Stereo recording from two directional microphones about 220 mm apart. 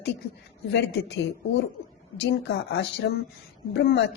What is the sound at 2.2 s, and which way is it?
Speech, 50° left (ahead or behind).